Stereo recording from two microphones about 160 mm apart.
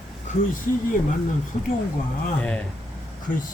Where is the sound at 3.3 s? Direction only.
60° left (ahead or behind).